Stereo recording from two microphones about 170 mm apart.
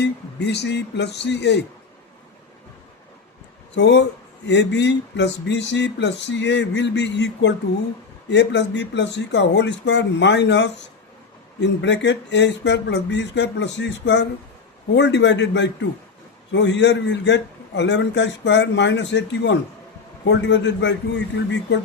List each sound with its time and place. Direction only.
0.0 s speech: 80° left
3.8 s a man's voice: 90° left